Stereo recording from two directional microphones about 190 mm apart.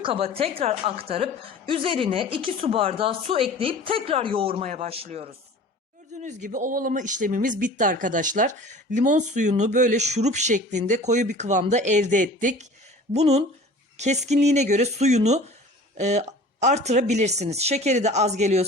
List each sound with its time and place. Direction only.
0.0 s a woman's voice: 30° right (ahead or behind)